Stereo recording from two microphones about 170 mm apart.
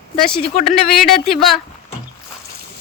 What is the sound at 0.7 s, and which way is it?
Speech, centre (ahead or behind).